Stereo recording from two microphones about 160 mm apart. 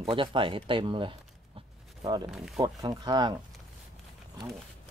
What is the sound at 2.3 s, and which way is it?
Speech, centre (ahead or behind).